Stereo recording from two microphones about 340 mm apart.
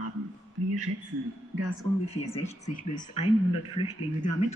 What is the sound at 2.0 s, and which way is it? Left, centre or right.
Speech, centre.